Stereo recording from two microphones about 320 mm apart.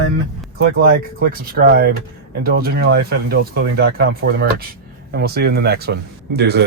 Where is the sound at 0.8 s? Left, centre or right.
Right.